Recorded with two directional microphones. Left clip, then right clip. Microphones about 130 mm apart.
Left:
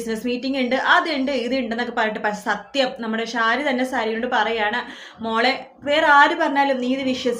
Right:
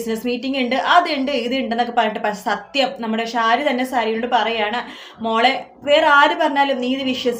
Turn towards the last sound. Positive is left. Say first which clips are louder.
# right 2 dB
turn(degrees=-20)  # may be behind; listen again after turning